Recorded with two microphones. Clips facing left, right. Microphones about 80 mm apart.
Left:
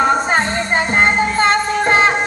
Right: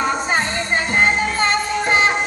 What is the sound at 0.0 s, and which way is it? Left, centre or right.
Music, left.